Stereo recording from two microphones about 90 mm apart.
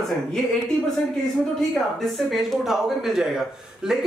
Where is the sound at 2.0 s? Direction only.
Centre (ahead or behind).